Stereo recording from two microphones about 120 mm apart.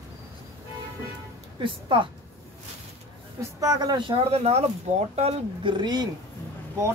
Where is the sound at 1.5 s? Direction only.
45° right (ahead or behind).